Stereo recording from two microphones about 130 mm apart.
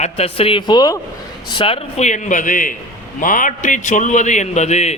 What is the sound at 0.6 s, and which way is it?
Speech, 35° left (ahead or behind).